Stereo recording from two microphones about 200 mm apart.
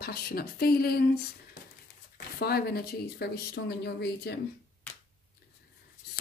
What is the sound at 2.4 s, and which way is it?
Speech, 50° left (ahead or behind).